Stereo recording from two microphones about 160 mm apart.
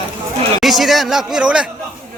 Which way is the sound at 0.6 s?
Centre (ahead or behind).